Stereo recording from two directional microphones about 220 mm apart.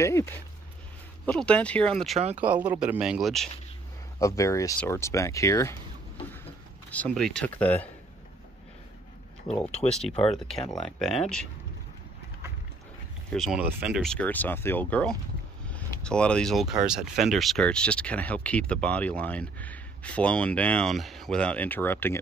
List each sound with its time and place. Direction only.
0.0 s speech: 10° left (ahead or behind)
2.1 s speech: 30° right (ahead or behind)
2.4 s speech: 5° right (ahead or behind)
4.2 s speech: 15° left (ahead or behind)
6.9 s speech: 5° left (ahead or behind)
9.8 s speech: 20° left (ahead or behind)
10.2 s speech: centre (ahead or behind)
13.3 s speech: centre (ahead or behind)